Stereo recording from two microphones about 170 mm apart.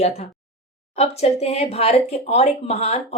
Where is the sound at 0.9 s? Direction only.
40° left (ahead or behind).